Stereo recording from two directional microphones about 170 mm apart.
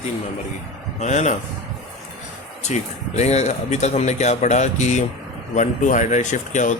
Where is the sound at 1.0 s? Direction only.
45° left (ahead or behind).